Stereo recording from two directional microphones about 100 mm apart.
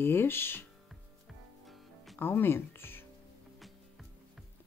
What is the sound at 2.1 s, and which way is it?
Speech, 20° left (ahead or behind).